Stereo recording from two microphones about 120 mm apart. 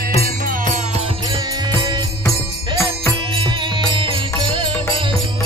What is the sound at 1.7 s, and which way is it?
Music, 40° right (ahead or behind).